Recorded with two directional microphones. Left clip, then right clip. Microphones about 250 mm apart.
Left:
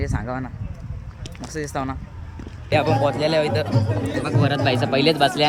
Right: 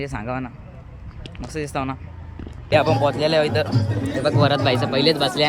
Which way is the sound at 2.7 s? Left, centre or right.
Centre.